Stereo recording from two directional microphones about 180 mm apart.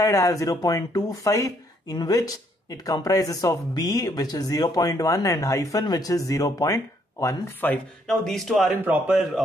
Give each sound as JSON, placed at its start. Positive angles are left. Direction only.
{"t": 0.0, "sound": "speech", "side_deg": 20}